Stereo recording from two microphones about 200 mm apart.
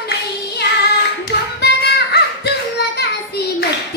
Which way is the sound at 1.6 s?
55° left (ahead or behind).